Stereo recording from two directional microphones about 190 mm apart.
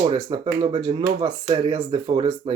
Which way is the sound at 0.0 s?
25° right (ahead or behind).